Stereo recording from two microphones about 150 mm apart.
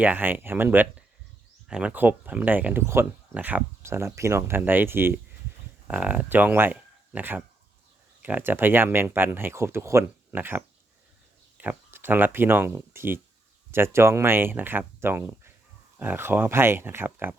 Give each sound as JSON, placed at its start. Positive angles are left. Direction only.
{"t": 0.0, "sound": "speech", "side_deg": -10}